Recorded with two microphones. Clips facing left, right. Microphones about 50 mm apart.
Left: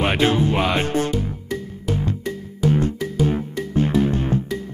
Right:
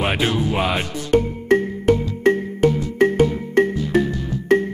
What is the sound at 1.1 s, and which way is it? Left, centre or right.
Music, right.